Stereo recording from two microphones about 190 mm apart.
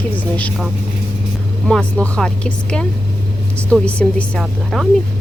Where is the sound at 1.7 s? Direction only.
5° left (ahead or behind).